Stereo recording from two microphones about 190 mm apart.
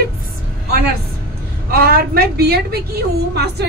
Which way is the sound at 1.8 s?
50° right (ahead or behind).